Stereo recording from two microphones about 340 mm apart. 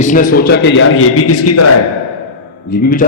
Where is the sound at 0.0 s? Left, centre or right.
Left.